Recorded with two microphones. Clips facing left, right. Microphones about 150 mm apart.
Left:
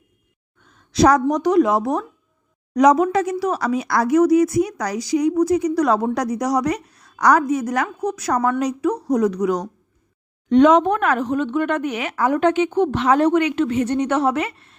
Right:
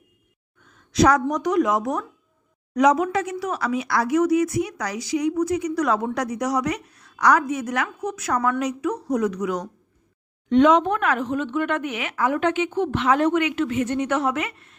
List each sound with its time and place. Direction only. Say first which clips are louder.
0.9 s speech: left 3 dB; 35° left (ahead or behind)